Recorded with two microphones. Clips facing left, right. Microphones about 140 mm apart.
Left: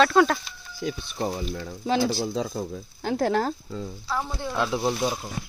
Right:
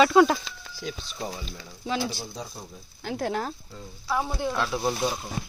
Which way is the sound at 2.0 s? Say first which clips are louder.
Left 7 dB; 90° left.